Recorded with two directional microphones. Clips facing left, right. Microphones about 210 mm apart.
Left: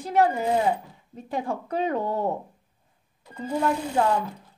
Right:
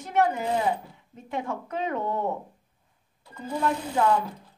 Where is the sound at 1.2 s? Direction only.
35° left (ahead or behind).